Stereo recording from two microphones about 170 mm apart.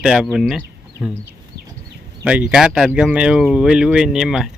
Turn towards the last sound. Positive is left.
turn(degrees=0)  # may be behind; listen again after turning